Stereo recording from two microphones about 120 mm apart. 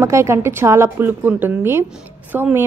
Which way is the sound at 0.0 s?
25° right (ahead or behind).